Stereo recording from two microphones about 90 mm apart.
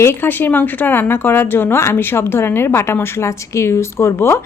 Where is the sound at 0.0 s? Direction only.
25° left (ahead or behind).